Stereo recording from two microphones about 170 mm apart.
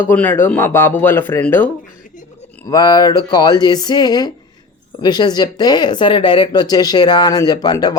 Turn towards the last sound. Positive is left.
turn(degrees=25)  # may be behind; listen again after turning